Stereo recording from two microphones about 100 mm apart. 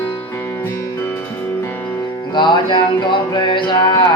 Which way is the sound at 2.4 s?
50° left (ahead or behind).